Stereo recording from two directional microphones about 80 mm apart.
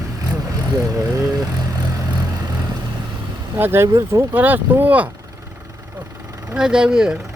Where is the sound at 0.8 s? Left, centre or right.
Right.